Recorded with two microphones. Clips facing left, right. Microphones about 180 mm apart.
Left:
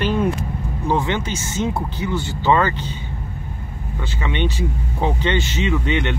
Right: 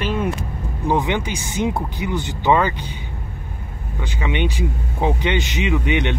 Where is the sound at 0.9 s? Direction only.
15° right (ahead or behind).